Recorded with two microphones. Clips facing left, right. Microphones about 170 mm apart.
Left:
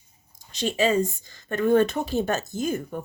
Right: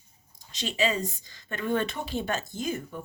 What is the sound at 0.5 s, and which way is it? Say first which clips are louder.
A woman's voice: left 6 dB; 50° left (ahead or behind).